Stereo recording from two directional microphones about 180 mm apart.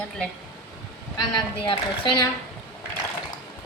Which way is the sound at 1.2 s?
25° left (ahead or behind).